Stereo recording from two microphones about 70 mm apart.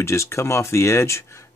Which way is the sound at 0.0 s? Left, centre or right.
Left.